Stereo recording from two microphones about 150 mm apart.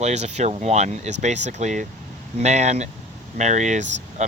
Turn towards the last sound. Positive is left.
turn(degrees=-50)  # may be behind; listen again after turning